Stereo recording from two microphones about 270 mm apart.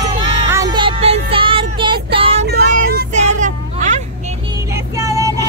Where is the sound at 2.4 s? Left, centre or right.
Right.